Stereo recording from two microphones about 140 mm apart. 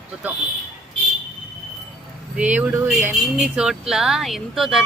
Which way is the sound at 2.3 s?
10° right (ahead or behind).